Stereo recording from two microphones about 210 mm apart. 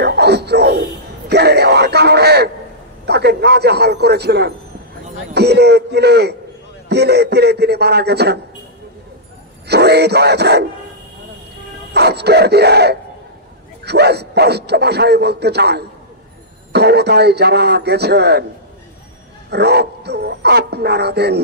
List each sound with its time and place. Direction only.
0.0 s a sound: 50° right (ahead or behind)
3.1 s a man's voice: 50° right (ahead or behind)
9.7 s speech: 50° right (ahead or behind)
11.9 s speech: 50° right (ahead or behind)
19.5 s speech: 50° right (ahead or behind)